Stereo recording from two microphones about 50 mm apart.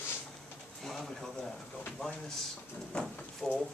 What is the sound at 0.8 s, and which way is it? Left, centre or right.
Speech, centre.